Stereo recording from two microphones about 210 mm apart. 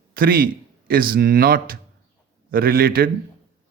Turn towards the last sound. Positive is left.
turn(degrees=-45)  # may be behind; listen again after turning